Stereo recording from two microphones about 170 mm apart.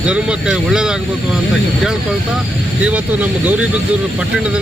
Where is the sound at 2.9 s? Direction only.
10° right (ahead or behind).